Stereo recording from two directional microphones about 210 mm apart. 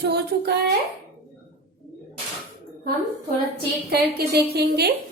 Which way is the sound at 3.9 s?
50° right (ahead or behind).